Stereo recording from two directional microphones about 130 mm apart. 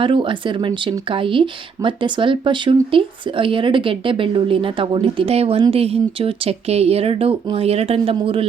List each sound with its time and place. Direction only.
0.0 s speech: 40° right (ahead or behind)